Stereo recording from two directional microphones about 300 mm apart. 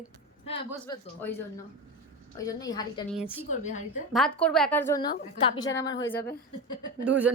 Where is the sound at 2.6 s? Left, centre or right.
Centre.